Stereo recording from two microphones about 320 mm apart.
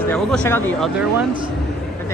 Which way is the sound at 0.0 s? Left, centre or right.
Centre.